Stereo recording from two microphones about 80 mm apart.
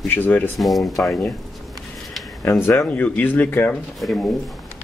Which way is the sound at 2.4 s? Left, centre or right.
Left.